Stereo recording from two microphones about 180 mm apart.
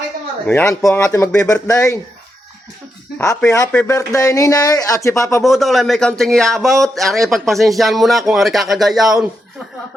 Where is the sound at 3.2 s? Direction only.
15° left (ahead or behind).